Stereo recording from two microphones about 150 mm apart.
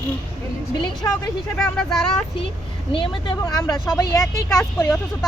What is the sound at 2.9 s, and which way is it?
Child singing, 35° left (ahead or behind).